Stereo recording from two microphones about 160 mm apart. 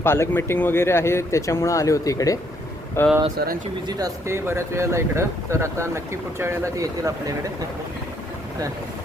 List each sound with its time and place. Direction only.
0.0 s speech: 15° left (ahead or behind)
3.3 s speech: 70° right (ahead or behind)
3.8 s speech: 25° right (ahead or behind)